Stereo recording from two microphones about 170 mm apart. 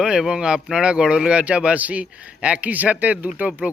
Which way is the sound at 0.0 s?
5° right (ahead or behind).